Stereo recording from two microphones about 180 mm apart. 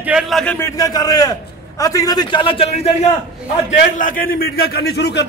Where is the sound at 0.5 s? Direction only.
15° left (ahead or behind); by 2.9 s 35° left (ahead or behind).